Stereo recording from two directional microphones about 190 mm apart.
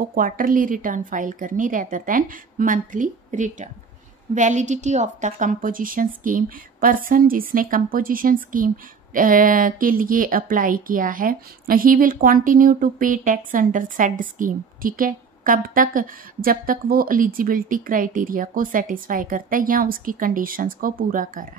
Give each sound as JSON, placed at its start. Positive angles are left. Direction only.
{"t": 0.1, "sound": "a woman's voice", "side_deg": -45}